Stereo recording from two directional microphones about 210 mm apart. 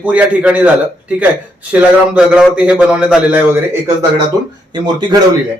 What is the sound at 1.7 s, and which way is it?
A man's voice, 5° right (ahead or behind).